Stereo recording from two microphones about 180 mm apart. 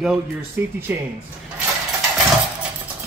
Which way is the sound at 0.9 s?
10° right (ahead or behind).